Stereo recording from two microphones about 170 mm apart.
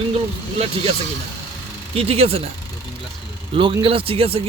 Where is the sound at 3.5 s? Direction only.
30° right (ahead or behind).